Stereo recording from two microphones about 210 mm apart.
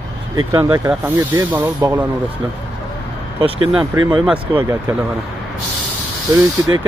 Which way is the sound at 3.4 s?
25° right (ahead or behind).